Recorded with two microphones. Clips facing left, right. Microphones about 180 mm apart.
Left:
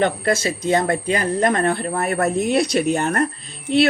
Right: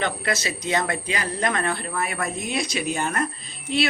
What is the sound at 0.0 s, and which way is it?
Speech, 50° left (ahead or behind).